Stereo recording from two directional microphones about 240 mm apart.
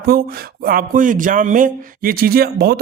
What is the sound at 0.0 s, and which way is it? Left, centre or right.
Speech, right.